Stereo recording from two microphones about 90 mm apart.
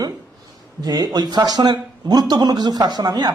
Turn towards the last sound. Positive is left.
turn(degrees=-50)  # may be behind; listen again after turning